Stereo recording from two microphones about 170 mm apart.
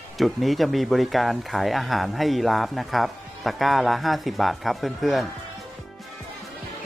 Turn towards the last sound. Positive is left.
turn(degrees=0)  # may be behind; listen again after turning